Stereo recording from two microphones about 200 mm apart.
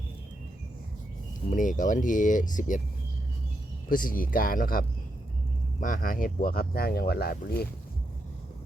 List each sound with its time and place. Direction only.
1.5 s speech: 40° left (ahead or behind)
3.8 s speech: 45° left (ahead or behind)